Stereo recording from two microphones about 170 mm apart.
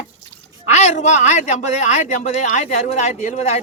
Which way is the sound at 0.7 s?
45° left (ahead or behind).